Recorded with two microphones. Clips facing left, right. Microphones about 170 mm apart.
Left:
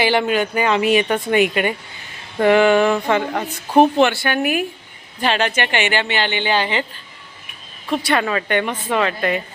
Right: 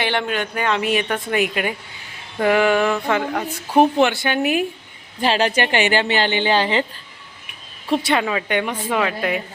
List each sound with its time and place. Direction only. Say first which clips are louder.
0.0 s a woman's voice: left 5 dB; 5° left (ahead or behind)
3.7 s speech: left 2 dB; 20° left (ahead or behind)
4.0 s a woman's voice: left 1 dB; 20° right (ahead or behind)
5.2 s a woman's voice: right 1 dB; 30° right (ahead or behind)
7.9 s a woman's voice: right 2 dB; 30° right (ahead or behind)
8.1 s speech: left 5 dB; 10° right (ahead or behind)